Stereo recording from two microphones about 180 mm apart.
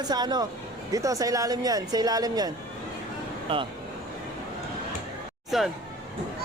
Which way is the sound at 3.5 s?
30° right (ahead or behind).